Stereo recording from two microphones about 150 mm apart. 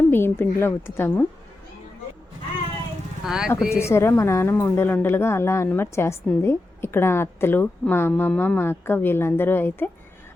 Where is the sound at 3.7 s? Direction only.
15° left (ahead or behind).